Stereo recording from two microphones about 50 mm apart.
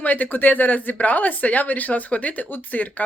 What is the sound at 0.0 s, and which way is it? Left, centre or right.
Speech, left.